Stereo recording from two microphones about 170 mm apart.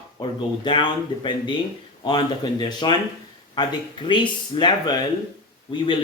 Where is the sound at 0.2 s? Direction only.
25° left (ahead or behind).